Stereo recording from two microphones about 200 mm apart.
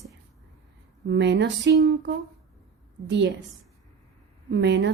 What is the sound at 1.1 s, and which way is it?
Speech, 60° right (ahead or behind).